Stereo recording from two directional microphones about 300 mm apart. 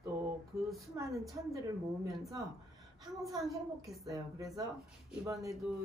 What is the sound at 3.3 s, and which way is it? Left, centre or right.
Speech, centre.